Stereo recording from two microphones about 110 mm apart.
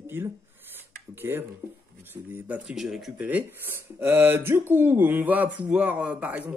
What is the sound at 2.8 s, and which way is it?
Speech, centre (ahead or behind).